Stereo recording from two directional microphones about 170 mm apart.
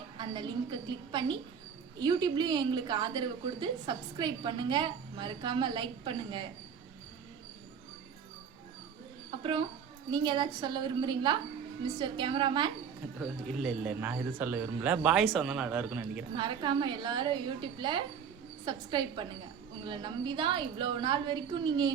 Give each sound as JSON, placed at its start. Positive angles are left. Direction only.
{"t": 0.2, "sound": "a woman's voice", "side_deg": -25}
{"t": 9.4, "sound": "a woman's voice", "side_deg": -30}
{"t": 13.1, "sound": "speech", "side_deg": 0}
{"t": 16.3, "sound": "a woman's voice", "side_deg": -25}